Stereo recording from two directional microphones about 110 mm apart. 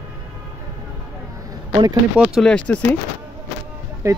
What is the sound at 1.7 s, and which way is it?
Speech, 40° right (ahead or behind).